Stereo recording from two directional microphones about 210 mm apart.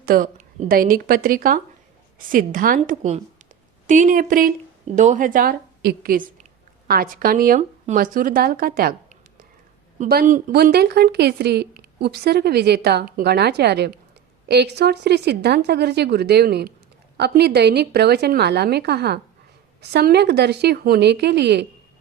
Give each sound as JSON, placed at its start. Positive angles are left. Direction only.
{"t": 0.0, "sound": "a woman's voice", "side_deg": -40}